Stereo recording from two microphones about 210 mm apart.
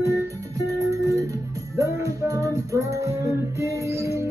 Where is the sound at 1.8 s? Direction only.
15° right (ahead or behind).